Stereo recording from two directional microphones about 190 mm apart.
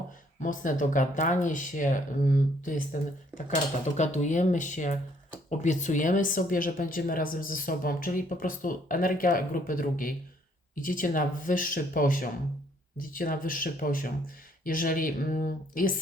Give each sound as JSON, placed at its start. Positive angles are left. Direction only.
{"t": 0.3, "sound": "speech", "side_deg": 40}